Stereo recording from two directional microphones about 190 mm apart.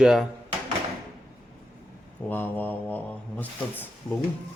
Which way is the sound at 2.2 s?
10° left (ahead or behind).